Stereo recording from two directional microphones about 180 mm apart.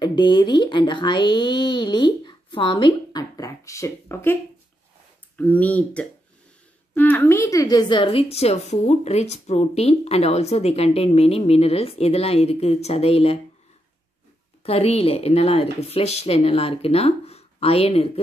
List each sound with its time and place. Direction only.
0.0 s speech: 25° left (ahead or behind)
5.4 s a woman's voice: 10° left (ahead or behind); by 13.4 s 35° left (ahead or behind)
14.6 s a woman's voice: 35° left (ahead or behind)